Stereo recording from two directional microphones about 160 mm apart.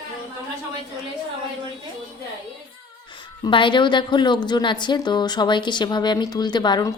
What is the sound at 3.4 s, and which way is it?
A woman's voice, 30° left (ahead or behind).